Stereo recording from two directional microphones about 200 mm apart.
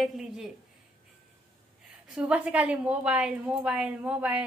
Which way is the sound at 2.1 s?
5° right (ahead or behind).